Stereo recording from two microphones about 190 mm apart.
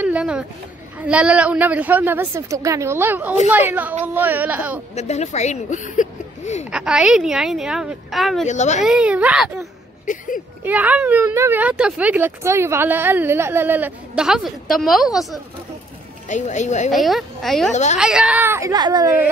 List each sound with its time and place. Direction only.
0.0 s a sound: 5° right (ahead or behind)
0.9 s speech: 5° right (ahead or behind)
4.9 s speech: 35° left (ahead or behind)
6.7 s a woman's voice: 5° right (ahead or behind)
8.5 s speech: 40° left (ahead or behind)
8.8 s a woman's voice: 5° right (ahead or behind)
10.0 s speech: 45° left (ahead or behind)
10.6 s speech: 10° right (ahead or behind)
16.3 s speech: 40° left (ahead or behind)
16.9 s a woman's voice: centre (ahead or behind); by 19.0 s 20° right (ahead or behind)